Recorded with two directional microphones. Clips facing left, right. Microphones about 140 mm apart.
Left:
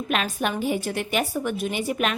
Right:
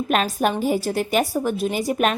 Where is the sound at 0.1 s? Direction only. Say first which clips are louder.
Right 5 dB; 40° right (ahead or behind).